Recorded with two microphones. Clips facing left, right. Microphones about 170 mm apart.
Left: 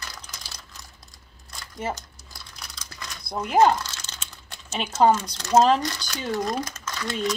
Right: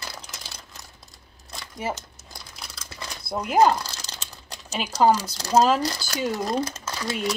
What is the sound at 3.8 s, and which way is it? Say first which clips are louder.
Typing: right 2 dB; 35° right (ahead or behind).